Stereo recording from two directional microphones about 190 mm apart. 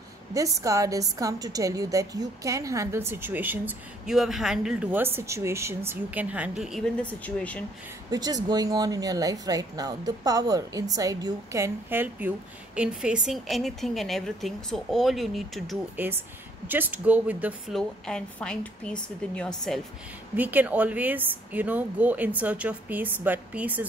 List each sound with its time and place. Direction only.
0.3 s a woman's voice: 15° right (ahead or behind); by 7.6 s 5° left (ahead or behind)
8.1 s a woman's voice: 20° right (ahead or behind); by 15.8 s centre (ahead or behind)
16.6 s a woman's voice: 10° right (ahead or behind)
20.3 s a woman's voice: 10° right (ahead or behind)